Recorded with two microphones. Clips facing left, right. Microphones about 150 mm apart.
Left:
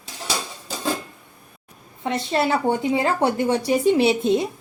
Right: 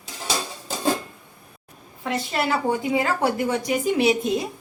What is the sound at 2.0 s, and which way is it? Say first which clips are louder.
A woman's voice: left 3 dB; 25° left (ahead or behind).